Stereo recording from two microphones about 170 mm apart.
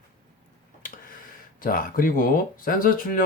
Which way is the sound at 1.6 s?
55° left (ahead or behind).